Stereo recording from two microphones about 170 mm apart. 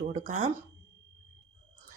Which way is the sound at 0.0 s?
45° right (ahead or behind).